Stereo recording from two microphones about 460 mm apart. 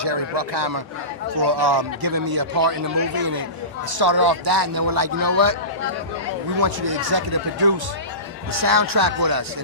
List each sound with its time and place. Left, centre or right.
0.0 s a man's voice: right
3.9 s a man's voice: right
6.6 s a man's voice: right